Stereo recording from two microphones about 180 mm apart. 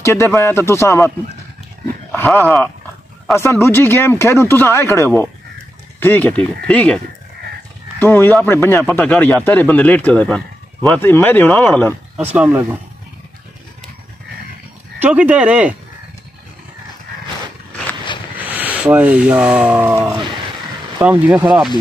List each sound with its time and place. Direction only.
0.0 s speech: 15° left (ahead or behind)
2.1 s speech: 10° left (ahead or behind)
8.0 s speech: 10° left (ahead or behind)
12.2 s speech: 10° right (ahead or behind)
15.0 s speech: 10° right (ahead or behind)
18.4 s speech: 10° right (ahead or behind)